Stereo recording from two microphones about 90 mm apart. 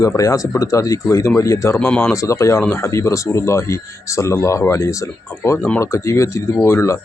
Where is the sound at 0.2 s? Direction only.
35° left (ahead or behind).